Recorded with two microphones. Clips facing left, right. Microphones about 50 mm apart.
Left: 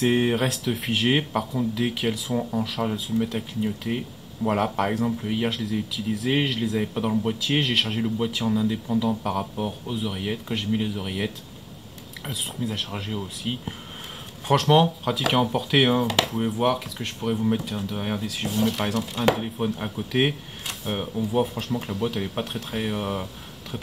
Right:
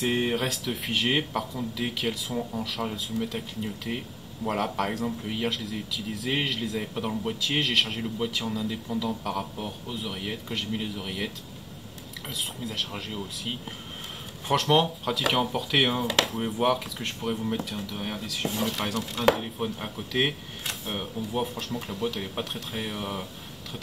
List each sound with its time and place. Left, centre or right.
0.0 s speech: centre
17.6 s speech: left
18.4 s speech: centre